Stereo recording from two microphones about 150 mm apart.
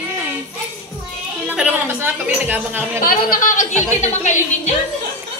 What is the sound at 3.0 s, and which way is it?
A woman's voice, 70° left (ahead or behind).